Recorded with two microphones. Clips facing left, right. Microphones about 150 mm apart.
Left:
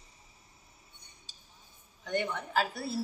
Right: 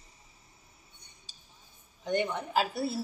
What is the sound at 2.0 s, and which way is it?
Speech, 20° right (ahead or behind).